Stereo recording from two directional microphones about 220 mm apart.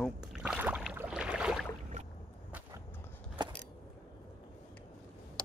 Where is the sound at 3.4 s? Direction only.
20° right (ahead or behind).